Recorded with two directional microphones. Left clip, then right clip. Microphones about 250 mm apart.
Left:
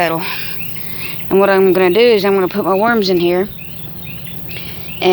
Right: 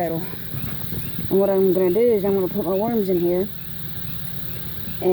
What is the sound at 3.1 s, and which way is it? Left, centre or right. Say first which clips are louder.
Speech: left 7 dB; left.